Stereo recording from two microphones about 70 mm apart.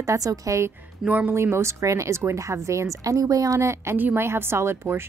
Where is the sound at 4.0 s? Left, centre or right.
Right.